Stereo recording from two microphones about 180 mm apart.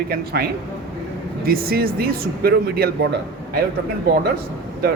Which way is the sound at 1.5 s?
55° right (ahead or behind).